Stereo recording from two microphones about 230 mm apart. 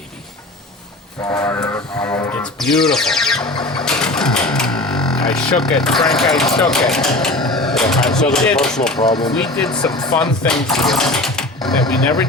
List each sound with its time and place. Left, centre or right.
1.3 s speech: centre
9.0 s speech: centre
9.3 s speech: centre
9.9 s speech: centre
10.2 s speech: centre
11.1 s a sound: centre